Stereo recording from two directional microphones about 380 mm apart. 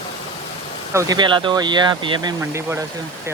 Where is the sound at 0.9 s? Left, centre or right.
Centre.